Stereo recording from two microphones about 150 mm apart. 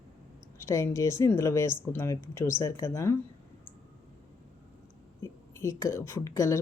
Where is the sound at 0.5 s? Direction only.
20° left (ahead or behind).